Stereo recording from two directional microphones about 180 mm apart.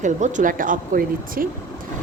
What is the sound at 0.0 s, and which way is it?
Speech, 45° right (ahead or behind).